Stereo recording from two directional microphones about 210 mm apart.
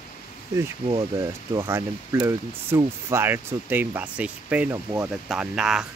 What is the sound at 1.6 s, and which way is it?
Speech, 15° right (ahead or behind).